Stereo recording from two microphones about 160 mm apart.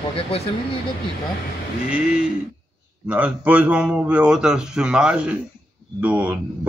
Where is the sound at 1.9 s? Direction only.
5° right (ahead or behind).